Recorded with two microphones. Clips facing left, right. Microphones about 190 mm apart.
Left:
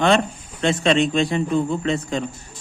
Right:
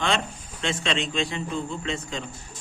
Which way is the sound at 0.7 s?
50° left (ahead or behind).